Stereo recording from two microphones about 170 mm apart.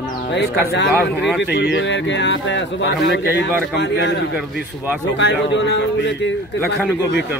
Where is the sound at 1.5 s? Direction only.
90° left.